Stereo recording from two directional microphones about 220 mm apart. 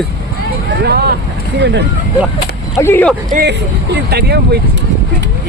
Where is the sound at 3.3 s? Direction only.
30° right (ahead or behind).